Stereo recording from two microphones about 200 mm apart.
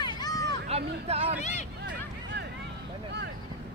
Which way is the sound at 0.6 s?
30° right (ahead or behind).